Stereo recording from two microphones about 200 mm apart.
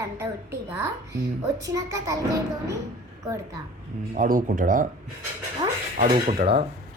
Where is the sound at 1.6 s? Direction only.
15° right (ahead or behind).